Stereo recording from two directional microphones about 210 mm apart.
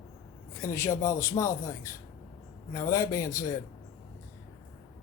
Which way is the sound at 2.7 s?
15° left (ahead or behind).